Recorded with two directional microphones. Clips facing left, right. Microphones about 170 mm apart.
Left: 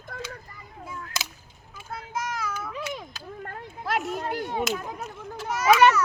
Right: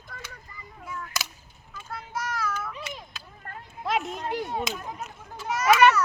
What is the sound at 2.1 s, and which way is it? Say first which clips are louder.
Child singing: right 1 dB; 20° left (ahead or behind).